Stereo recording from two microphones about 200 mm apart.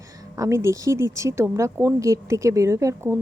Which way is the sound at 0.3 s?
15° right (ahead or behind).